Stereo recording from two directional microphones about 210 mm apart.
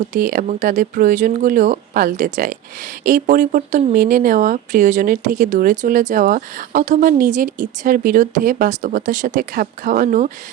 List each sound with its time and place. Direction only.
0.1 s speech: 40° right (ahead or behind)